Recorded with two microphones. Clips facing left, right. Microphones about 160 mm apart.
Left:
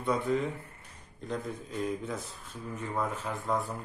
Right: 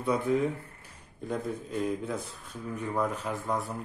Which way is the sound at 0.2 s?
5° right (ahead or behind).